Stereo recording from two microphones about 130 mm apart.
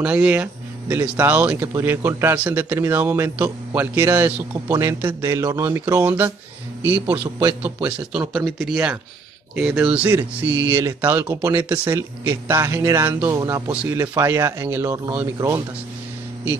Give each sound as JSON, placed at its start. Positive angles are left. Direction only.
{"t": 0.0, "sound": "a man's voice", "side_deg": -10}